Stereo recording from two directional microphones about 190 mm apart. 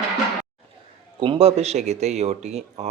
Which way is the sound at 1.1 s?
30° right (ahead or behind).